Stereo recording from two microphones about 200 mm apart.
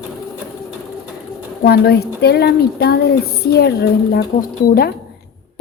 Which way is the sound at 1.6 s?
55° left (ahead or behind).